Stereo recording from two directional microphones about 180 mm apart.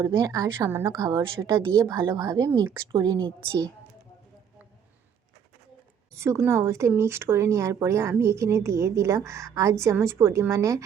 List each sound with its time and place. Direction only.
0.2 s speech: 20° right (ahead or behind)
0.9 s speech: 25° right (ahead or behind)
6.1 s speech: 15° right (ahead or behind)